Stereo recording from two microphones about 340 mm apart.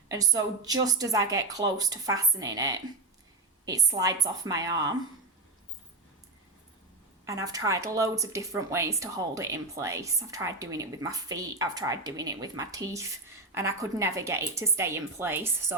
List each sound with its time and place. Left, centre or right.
0.1 s speech: centre
7.3 s speech: centre